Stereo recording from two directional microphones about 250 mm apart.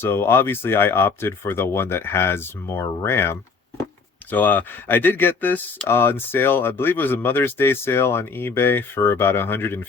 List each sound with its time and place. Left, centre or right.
0.0 s speech: centre